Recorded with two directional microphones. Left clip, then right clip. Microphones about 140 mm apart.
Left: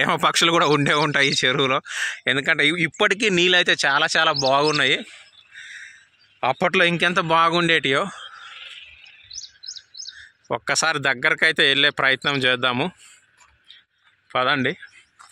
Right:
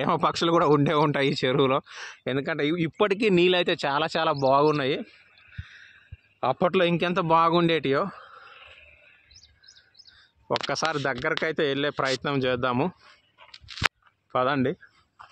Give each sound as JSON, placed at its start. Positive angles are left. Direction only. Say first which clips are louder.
{"t": 0.0, "sound": "a man's voice", "louder": "left 6 dB", "side_deg": 10}
{"t": 1.9, "sound": "speech", "louder": "left 10 dB", "side_deg": 10}
{"t": 5.5, "sound": "a sound", "louder": "left 10 dB", "side_deg": 15}
{"t": 6.4, "sound": "a man's voice", "louder": "left 4 dB", "side_deg": 15}
{"t": 7.9, "sound": "a man's voice", "louder": "left 4 dB", "side_deg": 20}
{"t": 8.5, "sound": "a sound", "louder": "left 10 dB", "side_deg": -40}
{"t": 9.6, "sound": "chirp", "louder": "left 17 dB", "side_deg": 0}
{"t": 10.5, "sound": "a man's voice", "louder": "left 5 dB", "side_deg": 10}
{"t": 14.3, "sound": "speech", "louder": "left 4 dB", "side_deg": 0}